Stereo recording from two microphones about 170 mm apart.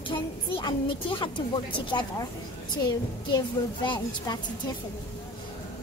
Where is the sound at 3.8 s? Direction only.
25° left (ahead or behind).